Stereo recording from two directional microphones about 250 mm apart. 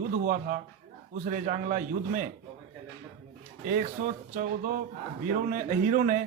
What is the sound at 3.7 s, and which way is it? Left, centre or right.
A man's voice, right.